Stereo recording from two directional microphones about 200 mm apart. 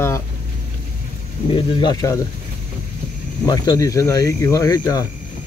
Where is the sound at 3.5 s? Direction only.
20° left (ahead or behind).